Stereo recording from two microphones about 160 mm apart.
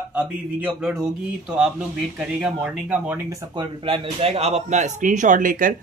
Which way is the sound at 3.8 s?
35° right (ahead or behind).